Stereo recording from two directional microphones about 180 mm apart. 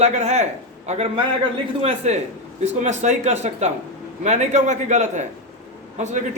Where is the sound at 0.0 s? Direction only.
40° right (ahead or behind).